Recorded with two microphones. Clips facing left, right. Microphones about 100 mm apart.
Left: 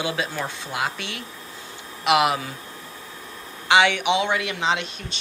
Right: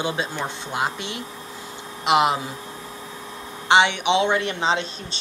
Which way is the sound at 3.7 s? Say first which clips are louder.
Right 1 dB; 25° right (ahead or behind).